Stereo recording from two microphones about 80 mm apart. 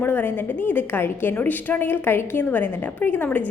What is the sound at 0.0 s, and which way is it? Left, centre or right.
A woman's voice, left.